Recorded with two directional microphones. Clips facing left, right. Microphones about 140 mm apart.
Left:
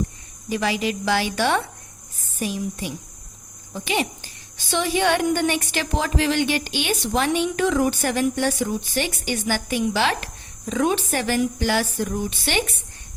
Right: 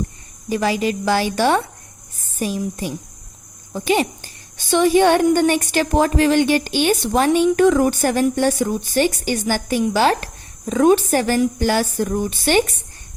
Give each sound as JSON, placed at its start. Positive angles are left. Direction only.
{"t": 0.5, "sound": "a woman's voice", "side_deg": -40}